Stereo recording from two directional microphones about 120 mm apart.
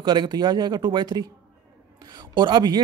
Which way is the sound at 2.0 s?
40° right (ahead or behind).